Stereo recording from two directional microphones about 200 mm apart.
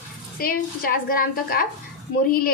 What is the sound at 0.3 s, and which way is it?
A woman's voice, 45° left (ahead or behind).